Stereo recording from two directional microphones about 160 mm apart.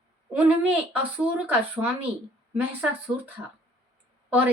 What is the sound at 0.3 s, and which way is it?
Speech, 10° right (ahead or behind).